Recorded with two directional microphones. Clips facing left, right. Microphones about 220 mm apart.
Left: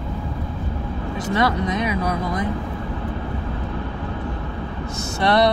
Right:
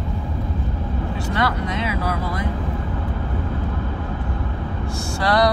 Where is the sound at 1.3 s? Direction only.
20° left (ahead or behind).